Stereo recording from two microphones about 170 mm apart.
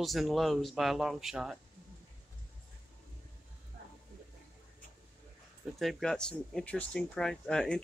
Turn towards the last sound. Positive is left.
turn(degrees=5)  # may be behind; listen again after turning